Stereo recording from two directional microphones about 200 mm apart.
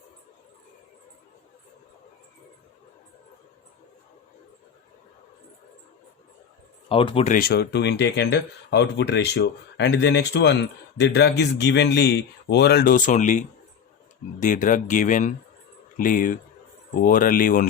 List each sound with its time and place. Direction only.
6.8 s speech: 25° left (ahead or behind)
7.3 s speech: 50° left (ahead or behind)